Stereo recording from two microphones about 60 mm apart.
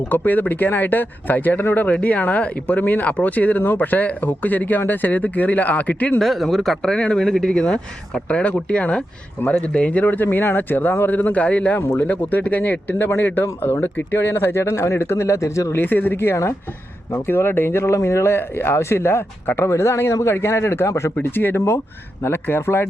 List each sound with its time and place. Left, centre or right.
0.1 s speech: left
6.1 s speech: centre
6.9 s speech: centre
11.8 s speech: left
12.0 s speech: left
15.7 s speech: left
16.2 s speech: left
17.2 s speech: left
21.2 s speech: left